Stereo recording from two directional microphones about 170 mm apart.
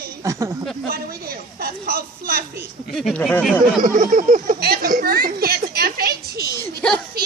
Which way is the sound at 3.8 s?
50° right (ahead or behind).